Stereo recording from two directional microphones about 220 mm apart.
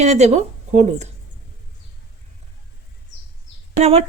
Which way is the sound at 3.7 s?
30° right (ahead or behind).